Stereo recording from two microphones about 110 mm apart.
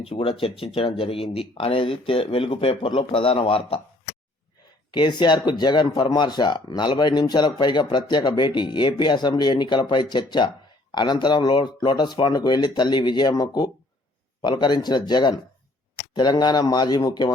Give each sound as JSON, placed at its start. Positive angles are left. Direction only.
{"t": 0.0, "sound": "speech", "side_deg": 60}
{"t": 4.9, "sound": "speech", "side_deg": 40}